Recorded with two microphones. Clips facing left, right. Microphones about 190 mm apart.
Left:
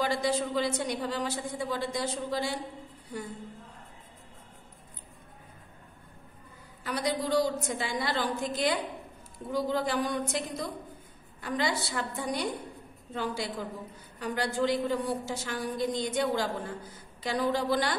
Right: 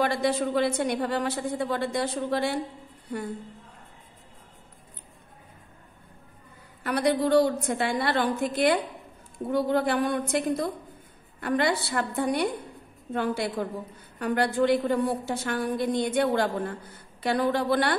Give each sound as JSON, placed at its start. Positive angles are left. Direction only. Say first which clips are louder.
{"t": 0.0, "sound": "a woman's voice", "louder": "right 4 dB", "side_deg": -60}
{"t": 6.8, "sound": "a woman's voice", "louder": "right 7 dB", "side_deg": -60}